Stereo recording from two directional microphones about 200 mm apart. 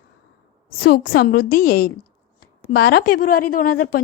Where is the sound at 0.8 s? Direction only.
50° left (ahead or behind).